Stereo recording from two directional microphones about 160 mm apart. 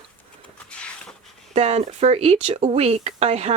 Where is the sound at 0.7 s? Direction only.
5° left (ahead or behind).